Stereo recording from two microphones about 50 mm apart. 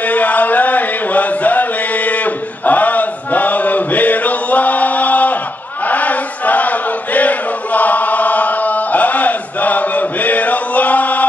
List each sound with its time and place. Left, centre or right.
0.1 s chant: left